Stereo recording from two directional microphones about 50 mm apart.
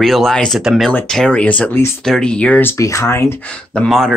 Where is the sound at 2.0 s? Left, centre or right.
Centre.